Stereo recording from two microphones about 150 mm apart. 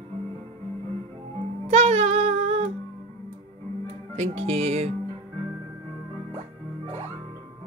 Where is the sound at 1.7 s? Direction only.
45° right (ahead or behind).